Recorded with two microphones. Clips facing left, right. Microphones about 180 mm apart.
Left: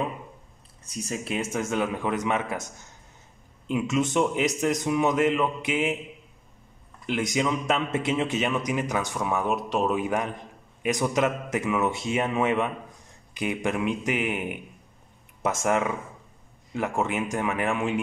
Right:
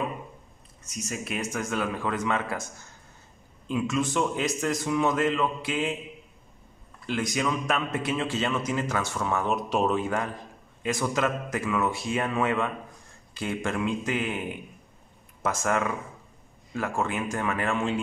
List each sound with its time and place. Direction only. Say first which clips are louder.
0.8 s a man's voice: left 3 dB; 30° left (ahead or behind)
7.1 s a man's voice: left 2 dB; 20° left (ahead or behind)
9.7 s speech: right 2 dB; centre (ahead or behind)
9.9 s a man's voice: left 1 dB; 15° left (ahead or behind)